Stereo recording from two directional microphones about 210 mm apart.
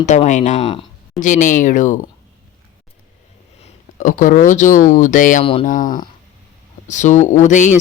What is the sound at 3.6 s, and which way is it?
Speech, 40° left (ahead or behind).